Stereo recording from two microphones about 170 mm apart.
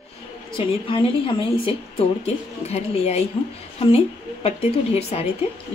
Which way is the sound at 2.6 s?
40° left (ahead or behind).